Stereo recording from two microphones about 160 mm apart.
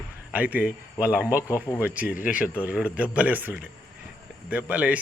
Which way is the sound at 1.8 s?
10° right (ahead or behind).